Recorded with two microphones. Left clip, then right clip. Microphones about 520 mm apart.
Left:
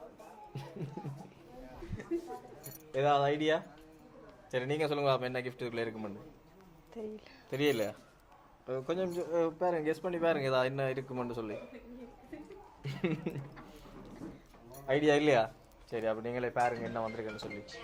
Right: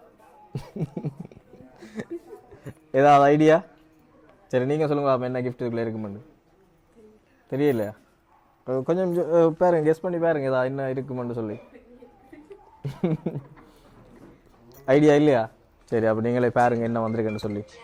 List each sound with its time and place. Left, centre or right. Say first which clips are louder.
2.9 s a man's voice: right 13 dB; right
7.5 s speech: right 8 dB; right
12.8 s chuckle: right 8 dB; right
14.8 s speech: right 10 dB; right
15.9 s a man's voice: right 12 dB; right